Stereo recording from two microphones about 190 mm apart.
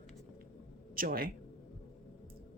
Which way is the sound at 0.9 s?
50° right (ahead or behind).